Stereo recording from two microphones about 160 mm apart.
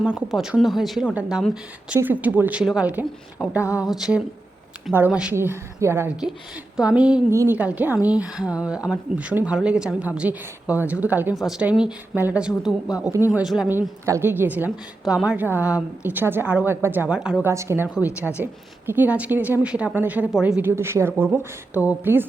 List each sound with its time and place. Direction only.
0.0 s a woman's voice: 5° right (ahead or behind)
13.3 s a woman's voice: 5° right (ahead or behind)
14.0 s a woman's voice: 15° right (ahead or behind)
17.5 s a woman's voice: 15° right (ahead or behind)
17.8 s a woman's voice: 5° right (ahead or behind)